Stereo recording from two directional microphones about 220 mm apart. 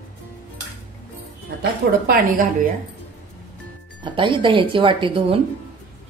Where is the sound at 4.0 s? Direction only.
20° right (ahead or behind).